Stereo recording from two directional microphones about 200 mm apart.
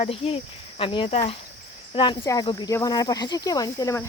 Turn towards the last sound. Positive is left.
turn(degrees=15)  # may be behind; listen again after turning